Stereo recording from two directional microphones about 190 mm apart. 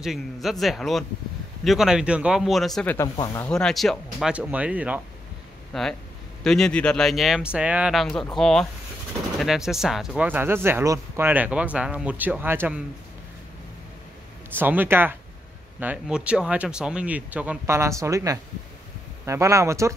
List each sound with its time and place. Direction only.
0.0 s speech: centre (ahead or behind)
5.7 s speech: 5° left (ahead or behind)
14.6 s speech: 10° right (ahead or behind)